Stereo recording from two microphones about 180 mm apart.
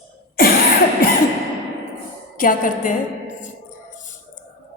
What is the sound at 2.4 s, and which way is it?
A woman's voice, 50° left (ahead or behind).